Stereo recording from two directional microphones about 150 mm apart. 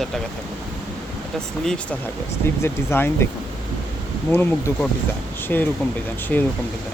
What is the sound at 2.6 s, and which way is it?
Speech, 15° left (ahead or behind).